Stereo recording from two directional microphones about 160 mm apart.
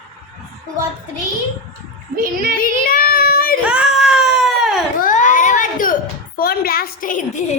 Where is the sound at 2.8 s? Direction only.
65° left (ahead or behind).